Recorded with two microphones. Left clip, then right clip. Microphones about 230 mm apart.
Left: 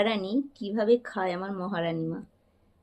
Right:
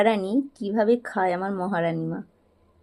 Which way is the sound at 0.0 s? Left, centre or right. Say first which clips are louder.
Right 5 dB; right.